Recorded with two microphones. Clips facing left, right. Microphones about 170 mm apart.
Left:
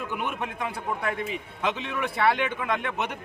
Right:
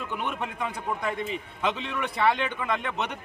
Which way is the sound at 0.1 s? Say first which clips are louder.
Left 1 dB; 5° left (ahead or behind).